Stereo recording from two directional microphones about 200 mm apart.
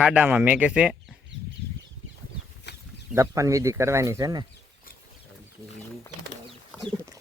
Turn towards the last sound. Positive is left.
turn(degrees=-20)  # may be behind; listen again after turning